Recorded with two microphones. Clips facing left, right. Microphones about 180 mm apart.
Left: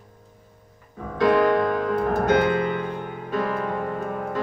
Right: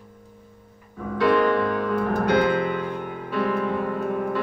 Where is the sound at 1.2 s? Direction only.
40° left (ahead or behind).